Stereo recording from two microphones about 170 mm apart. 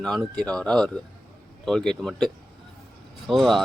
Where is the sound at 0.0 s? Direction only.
5° left (ahead or behind).